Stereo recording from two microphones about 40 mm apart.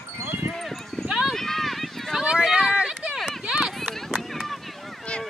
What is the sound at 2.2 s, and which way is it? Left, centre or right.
Run, centre.